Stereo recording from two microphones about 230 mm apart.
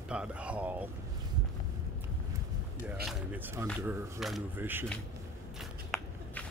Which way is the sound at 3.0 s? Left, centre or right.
Centre.